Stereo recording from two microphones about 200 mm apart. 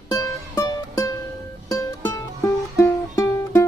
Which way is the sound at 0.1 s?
15° left (ahead or behind).